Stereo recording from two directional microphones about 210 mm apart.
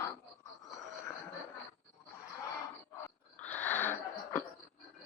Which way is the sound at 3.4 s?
5° left (ahead or behind).